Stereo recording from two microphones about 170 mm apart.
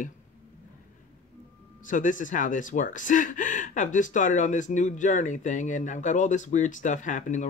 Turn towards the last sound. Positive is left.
turn(degrees=45)  # may be behind; listen again after turning